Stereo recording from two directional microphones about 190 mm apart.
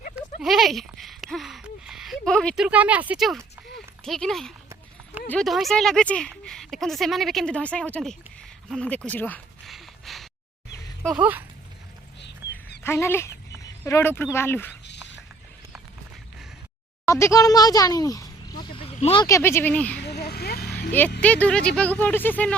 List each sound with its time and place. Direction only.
0.3 s a sound: centre (ahead or behind)
2.6 s speech: 10° right (ahead or behind)
9.0 s a sound: 10° left (ahead or behind)
11.0 s speech: 5° right (ahead or behind)
12.2 s dog: 60° left (ahead or behind)
12.8 s a sound: 15° left (ahead or behind)
14.3 s speech: 10° left (ahead or behind)
17.1 s speech: 15° left (ahead or behind); by 19.2 s 30° left (ahead or behind)
19.2 s speech: 15° left (ahead or behind)
20.0 s vehicle: 60° left (ahead or behind)
21.2 s speech: 5° left (ahead or behind)